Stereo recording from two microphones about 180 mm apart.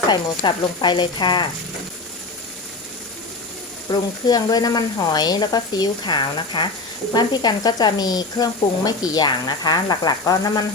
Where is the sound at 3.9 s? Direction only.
20° left (ahead or behind).